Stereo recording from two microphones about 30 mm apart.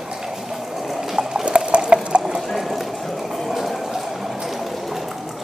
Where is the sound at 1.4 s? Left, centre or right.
Right.